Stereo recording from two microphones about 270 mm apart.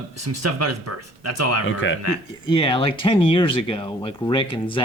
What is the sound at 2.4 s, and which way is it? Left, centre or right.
Speech, centre.